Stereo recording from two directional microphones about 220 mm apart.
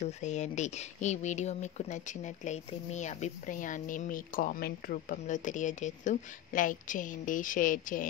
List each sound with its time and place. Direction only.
0.0 s speech: 30° left (ahead or behind)